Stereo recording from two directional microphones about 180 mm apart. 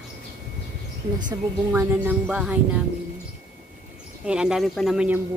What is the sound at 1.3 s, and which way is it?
Speech, 15° right (ahead or behind).